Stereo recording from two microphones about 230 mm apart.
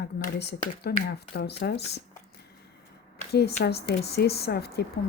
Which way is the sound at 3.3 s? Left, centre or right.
Left.